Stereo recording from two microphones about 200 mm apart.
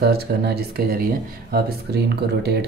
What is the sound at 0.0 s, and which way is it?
Speech, 50° right (ahead or behind).